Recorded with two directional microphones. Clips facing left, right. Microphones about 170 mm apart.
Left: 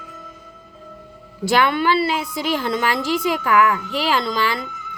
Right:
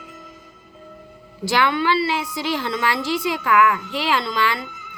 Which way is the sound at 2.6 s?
40° left (ahead or behind).